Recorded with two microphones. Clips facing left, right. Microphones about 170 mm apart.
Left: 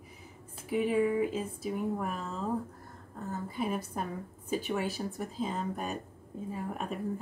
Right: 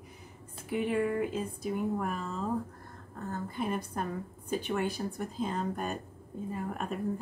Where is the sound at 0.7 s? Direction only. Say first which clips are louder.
Left 2 dB; centre (ahead or behind).